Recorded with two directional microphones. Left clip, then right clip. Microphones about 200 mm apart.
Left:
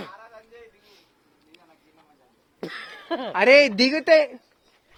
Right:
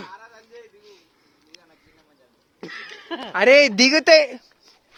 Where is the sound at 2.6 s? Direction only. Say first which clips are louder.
Even; 55° left (ahead or behind).